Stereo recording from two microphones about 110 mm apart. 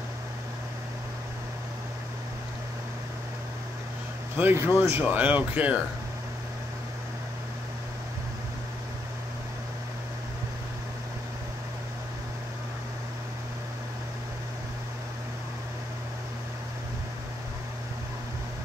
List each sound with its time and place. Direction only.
4.4 s speech: 20° right (ahead or behind)